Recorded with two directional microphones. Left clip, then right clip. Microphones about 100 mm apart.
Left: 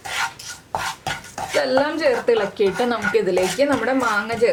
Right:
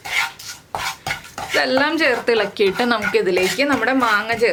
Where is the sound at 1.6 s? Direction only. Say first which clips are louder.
Right 2 dB; 30° right (ahead or behind).